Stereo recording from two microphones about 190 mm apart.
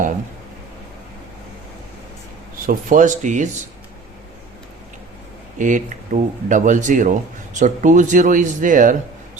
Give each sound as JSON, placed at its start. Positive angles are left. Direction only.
{"t": 2.6, "sound": "speech", "side_deg": -45}
{"t": 5.5, "sound": "speech", "side_deg": -40}